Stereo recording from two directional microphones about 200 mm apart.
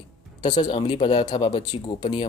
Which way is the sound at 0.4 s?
20° left (ahead or behind).